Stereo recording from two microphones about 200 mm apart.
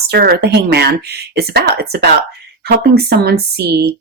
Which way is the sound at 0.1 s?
50° right (ahead or behind).